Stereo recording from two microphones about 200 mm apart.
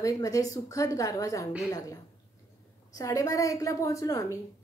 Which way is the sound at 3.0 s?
15° left (ahead or behind).